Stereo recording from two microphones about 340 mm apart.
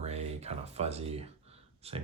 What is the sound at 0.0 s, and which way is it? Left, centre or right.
Speech, centre.